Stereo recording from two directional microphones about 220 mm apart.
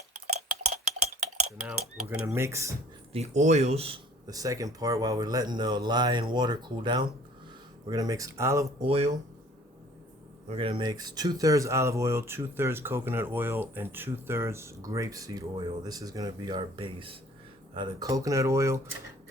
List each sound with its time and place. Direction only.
1.6 s speech: 10° right (ahead or behind)
3.1 s speech: 30° right (ahead or behind); by 8.9 s 15° right (ahead or behind)
8.9 s speech: 25° right (ahead or behind)
10.5 s speech: 25° right (ahead or behind)